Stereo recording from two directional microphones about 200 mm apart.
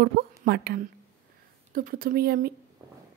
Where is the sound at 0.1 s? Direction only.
50° right (ahead or behind).